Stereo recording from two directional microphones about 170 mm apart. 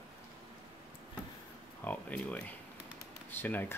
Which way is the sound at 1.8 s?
10° left (ahead or behind).